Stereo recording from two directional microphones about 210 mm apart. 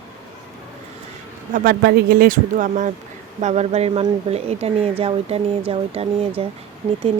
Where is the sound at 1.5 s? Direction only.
45° right (ahead or behind).